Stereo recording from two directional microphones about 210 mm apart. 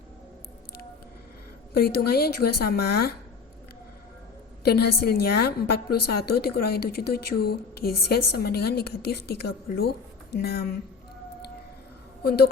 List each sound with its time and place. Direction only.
1.7 s a woman's voice: 45° left (ahead or behind)
4.6 s a woman's voice: 50° left (ahead or behind)
12.2 s a woman's voice: 50° left (ahead or behind)